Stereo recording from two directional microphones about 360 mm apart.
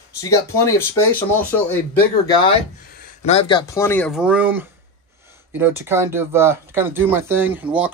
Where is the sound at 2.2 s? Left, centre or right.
Centre.